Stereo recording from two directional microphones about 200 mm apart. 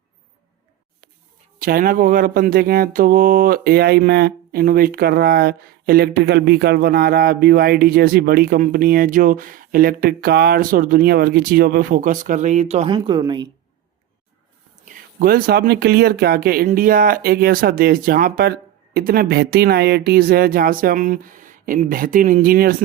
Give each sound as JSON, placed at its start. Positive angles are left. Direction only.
{"t": 1.5, "sound": "speech", "side_deg": -45}
{"t": 12.9, "sound": "speech", "side_deg": -20}
{"t": 14.8, "sound": "speech", "side_deg": -45}